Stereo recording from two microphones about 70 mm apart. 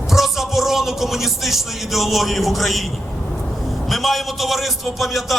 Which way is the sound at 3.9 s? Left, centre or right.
Centre.